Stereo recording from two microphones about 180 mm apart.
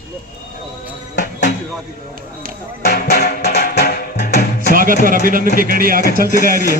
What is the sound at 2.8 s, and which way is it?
Music, 60° left (ahead or behind).